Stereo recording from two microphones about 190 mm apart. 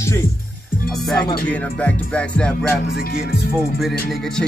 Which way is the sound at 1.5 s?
5° left (ahead or behind).